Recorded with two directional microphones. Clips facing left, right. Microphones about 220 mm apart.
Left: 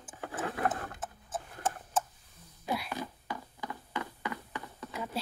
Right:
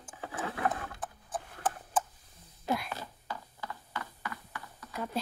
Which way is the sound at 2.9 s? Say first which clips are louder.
Left 4 dB; 15° left (ahead or behind).